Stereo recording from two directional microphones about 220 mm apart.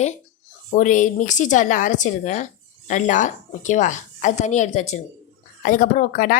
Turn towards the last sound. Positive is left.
turn(degrees=40)  # may be behind; listen again after turning